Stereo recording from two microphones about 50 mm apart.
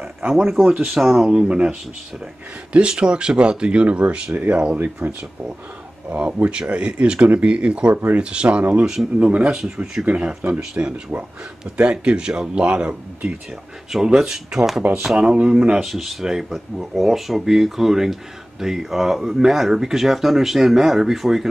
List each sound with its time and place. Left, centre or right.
0.3 s speech: centre
9.3 s speech: right
10.5 s speech: centre
10.8 s speech: right
14.1 s speech: centre
15.1 s speech: right
15.8 s speech: centre